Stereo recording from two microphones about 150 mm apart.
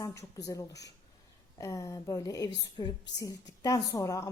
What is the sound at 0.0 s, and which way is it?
A woman's voice, 20° left (ahead or behind).